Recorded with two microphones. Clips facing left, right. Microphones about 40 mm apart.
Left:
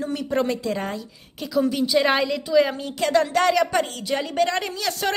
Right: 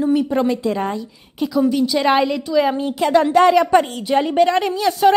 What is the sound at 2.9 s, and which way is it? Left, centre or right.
A woman's voice, centre.